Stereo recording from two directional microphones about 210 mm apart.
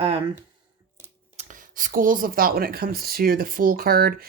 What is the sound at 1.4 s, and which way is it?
Speech, 40° right (ahead or behind).